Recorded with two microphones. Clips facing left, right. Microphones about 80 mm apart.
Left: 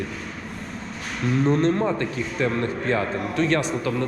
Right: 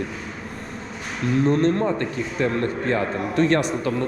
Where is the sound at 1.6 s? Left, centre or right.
Right.